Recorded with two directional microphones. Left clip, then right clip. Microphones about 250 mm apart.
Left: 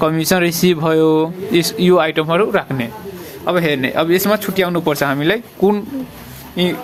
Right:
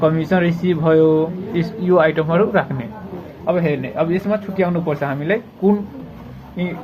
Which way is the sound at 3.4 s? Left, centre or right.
Left.